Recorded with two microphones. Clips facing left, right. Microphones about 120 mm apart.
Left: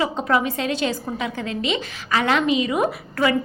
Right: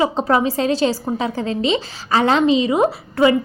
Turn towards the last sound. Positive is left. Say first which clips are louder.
# right 6 dB
turn(degrees=-25)  # may be behind; listen again after turning